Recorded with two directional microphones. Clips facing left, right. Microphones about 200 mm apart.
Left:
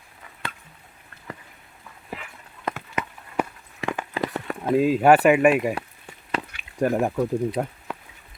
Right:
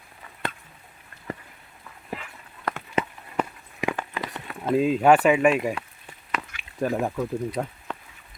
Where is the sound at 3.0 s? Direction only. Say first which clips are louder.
Right 6 dB; 30° right (ahead or behind).